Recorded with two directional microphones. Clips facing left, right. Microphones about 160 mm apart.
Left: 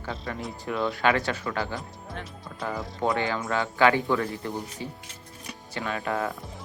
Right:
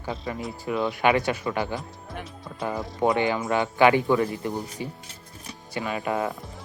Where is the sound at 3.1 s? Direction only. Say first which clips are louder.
Right 3 dB; 20° right (ahead or behind).